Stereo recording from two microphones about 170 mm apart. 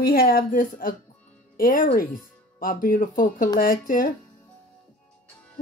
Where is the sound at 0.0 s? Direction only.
60° left (ahead or behind).